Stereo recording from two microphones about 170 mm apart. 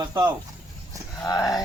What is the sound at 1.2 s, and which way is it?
Speech, 20° left (ahead or behind).